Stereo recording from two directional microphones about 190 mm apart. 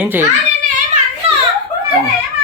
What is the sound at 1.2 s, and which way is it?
Children playing, 30° right (ahead or behind).